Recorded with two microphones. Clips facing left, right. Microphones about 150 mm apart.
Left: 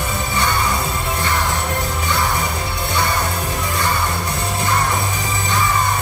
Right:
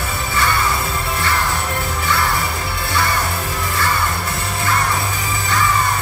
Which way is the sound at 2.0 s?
20° left (ahead or behind).